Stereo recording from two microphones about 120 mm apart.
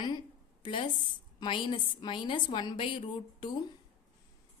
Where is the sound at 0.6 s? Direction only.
45° left (ahead or behind).